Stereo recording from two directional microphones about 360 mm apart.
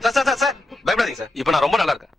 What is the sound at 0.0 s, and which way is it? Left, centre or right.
A man's voice, centre.